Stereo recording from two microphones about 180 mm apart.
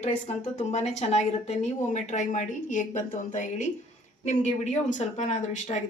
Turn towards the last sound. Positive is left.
turn(degrees=40)  # may be behind; listen again after turning